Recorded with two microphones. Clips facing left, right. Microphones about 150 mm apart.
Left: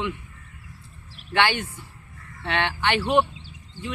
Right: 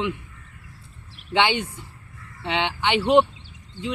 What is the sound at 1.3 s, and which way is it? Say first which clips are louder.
A woman's voice: right 1 dB; 20° right (ahead or behind).